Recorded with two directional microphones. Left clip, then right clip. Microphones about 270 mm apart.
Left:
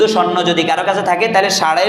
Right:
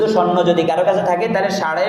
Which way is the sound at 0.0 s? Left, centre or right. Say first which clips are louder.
Left 2 dB; left.